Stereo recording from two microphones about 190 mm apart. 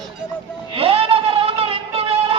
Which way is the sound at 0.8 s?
30° right (ahead or behind).